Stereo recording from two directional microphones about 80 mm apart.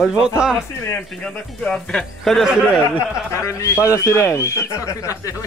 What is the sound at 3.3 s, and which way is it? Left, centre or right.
Speech, left.